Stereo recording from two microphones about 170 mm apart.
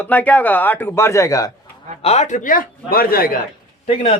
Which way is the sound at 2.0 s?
40° left (ahead or behind).